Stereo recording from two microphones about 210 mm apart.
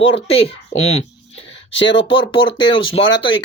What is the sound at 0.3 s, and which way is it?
Speech, 30° left (ahead or behind).